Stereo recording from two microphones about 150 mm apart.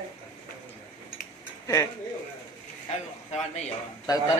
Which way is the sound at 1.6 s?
20° left (ahead or behind).